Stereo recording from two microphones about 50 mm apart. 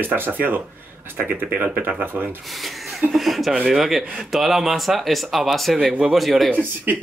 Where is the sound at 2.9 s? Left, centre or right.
Centre.